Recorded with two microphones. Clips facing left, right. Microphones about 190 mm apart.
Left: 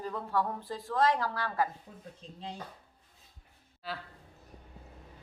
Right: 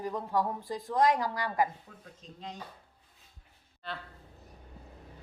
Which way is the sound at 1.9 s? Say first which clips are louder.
Left 2 dB; 30° left (ahead or behind).